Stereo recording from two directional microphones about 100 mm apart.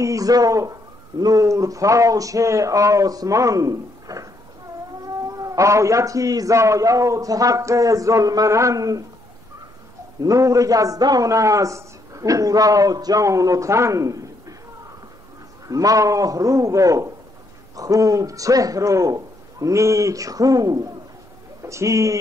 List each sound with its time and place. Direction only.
0.0 s a man's voice: 35° right (ahead or behind)
10.2 s a man's voice: 35° right (ahead or behind)
15.7 s a man's voice: 35° right (ahead or behind)